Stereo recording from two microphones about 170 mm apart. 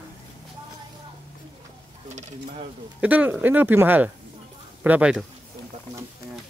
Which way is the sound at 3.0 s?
10° right (ahead or behind).